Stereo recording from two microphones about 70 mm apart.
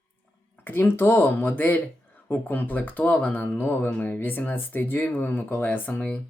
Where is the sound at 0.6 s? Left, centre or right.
Left.